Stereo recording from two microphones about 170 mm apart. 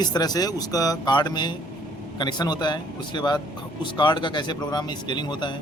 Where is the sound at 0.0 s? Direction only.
25° left (ahead or behind).